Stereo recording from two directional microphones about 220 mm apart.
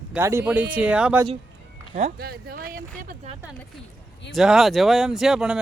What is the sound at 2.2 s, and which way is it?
Speech, 45° right (ahead or behind).